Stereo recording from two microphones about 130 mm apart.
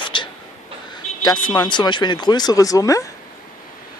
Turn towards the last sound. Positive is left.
turn(degrees=25)  # may be behind; listen again after turning